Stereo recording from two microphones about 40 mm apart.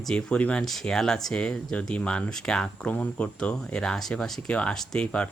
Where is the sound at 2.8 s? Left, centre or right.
Left.